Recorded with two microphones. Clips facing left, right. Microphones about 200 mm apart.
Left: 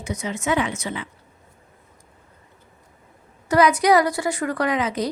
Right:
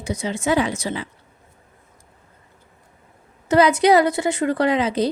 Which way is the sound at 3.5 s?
25° right (ahead or behind).